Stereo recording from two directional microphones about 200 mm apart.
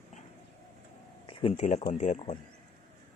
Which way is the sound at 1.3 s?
25° left (ahead or behind).